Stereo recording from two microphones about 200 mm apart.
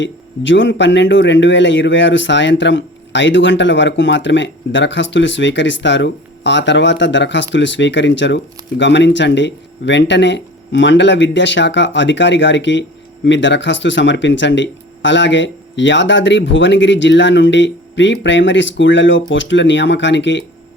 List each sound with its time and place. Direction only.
0.0 s speech: 65° left (ahead or behind)